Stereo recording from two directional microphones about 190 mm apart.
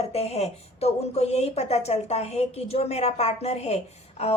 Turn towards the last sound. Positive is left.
turn(degrees=35)  # may be behind; listen again after turning